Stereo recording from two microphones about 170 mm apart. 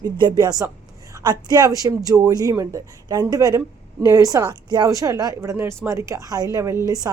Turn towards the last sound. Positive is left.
turn(degrees=-20)  # may be behind; listen again after turning